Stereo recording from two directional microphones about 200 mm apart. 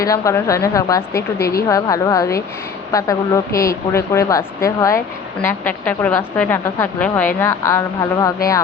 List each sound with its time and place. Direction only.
0.0 s speech: 15° left (ahead or behind)